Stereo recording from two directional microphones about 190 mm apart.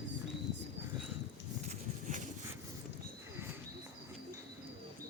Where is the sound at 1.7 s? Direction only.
40° right (ahead or behind).